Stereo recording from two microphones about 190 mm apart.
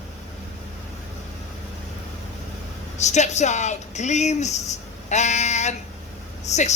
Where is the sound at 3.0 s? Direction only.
35° left (ahead or behind).